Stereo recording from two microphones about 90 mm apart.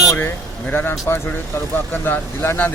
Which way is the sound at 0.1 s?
25° left (ahead or behind).